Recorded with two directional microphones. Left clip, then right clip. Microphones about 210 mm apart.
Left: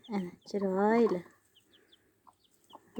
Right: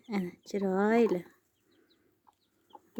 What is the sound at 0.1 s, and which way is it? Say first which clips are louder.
Speech: right 1 dB; 30° right (ahead or behind).